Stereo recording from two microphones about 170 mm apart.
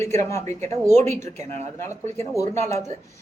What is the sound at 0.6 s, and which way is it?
Speech, 40° right (ahead or behind).